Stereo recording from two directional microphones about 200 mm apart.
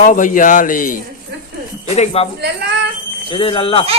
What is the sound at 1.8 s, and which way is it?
Speech, 35° left (ahead or behind).